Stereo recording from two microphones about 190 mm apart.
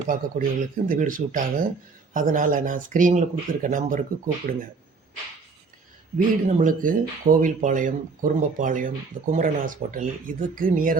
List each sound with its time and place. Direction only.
0.1 s speech: 45° right (ahead or behind)
6.5 s speech: 45° right (ahead or behind)